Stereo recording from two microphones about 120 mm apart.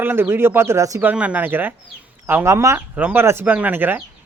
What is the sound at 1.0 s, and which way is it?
Speech, 15° right (ahead or behind).